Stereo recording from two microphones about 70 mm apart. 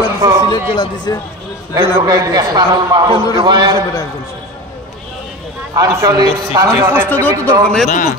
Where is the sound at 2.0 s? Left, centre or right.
Right.